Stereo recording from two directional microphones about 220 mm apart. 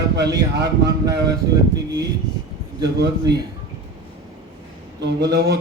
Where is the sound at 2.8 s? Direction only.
50° right (ahead or behind).